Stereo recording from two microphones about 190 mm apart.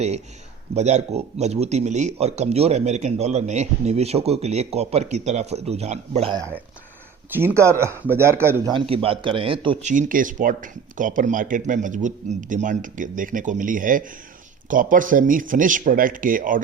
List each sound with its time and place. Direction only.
0.7 s speech: 35° right (ahead or behind)
6.3 s speech: 15° right (ahead or behind)
8.7 s speech: 30° right (ahead or behind)
9.9 s speech: 45° right (ahead or behind)